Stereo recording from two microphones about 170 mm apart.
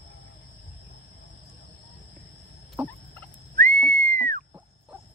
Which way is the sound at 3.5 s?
55° right (ahead or behind).